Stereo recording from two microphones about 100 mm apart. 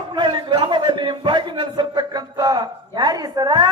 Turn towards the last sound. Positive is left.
turn(degrees=-45)  # may be behind; listen again after turning